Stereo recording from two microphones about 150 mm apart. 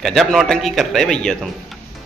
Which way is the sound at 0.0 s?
Centre (ahead or behind).